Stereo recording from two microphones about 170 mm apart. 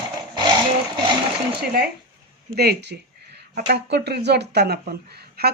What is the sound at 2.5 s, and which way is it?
Speech, 70° right (ahead or behind).